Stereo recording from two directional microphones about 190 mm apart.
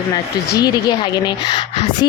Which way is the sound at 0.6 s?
20° left (ahead or behind).